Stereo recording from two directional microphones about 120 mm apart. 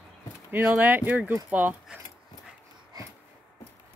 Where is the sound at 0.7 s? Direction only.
15° right (ahead or behind).